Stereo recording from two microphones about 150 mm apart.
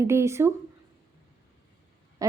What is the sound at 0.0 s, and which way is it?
Speech, 20° right (ahead or behind).